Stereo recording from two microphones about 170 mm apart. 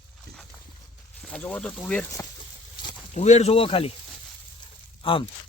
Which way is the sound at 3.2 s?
40° left (ahead or behind).